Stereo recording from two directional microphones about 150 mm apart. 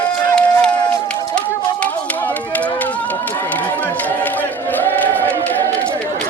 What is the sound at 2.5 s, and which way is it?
Run, 10° left (ahead or behind).